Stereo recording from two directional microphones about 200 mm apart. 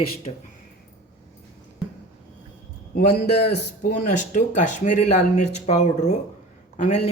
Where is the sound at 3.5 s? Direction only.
50° left (ahead or behind).